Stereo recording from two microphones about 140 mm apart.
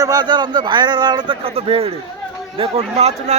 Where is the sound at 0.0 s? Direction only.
30° right (ahead or behind).